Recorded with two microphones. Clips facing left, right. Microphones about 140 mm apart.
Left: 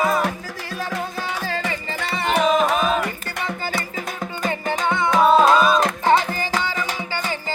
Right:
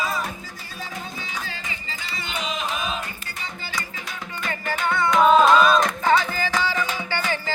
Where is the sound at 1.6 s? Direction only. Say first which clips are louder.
Left 9 dB; 70° left (ahead or behind); by 3.0 s 50° left (ahead or behind).